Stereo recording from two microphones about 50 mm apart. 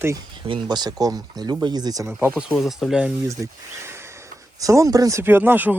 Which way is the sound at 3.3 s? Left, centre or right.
Right.